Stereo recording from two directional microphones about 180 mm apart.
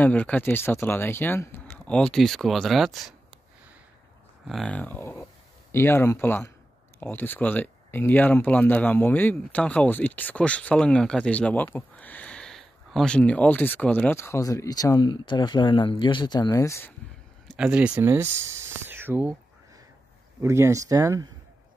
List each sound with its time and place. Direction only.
0.0 s speech: 10° left (ahead or behind)
4.5 s speech: 5° left (ahead or behind)
17.6 s speech: 5° right (ahead or behind)
20.4 s speech: 15° right (ahead or behind)